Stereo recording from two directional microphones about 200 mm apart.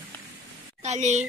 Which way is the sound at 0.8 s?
35° right (ahead or behind).